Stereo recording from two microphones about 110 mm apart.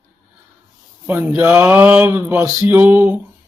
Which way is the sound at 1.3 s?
10° right (ahead or behind).